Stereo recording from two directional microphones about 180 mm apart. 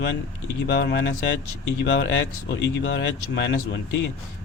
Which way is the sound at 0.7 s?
65° left (ahead or behind).